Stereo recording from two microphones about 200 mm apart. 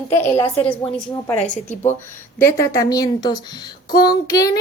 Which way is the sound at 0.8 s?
20° left (ahead or behind).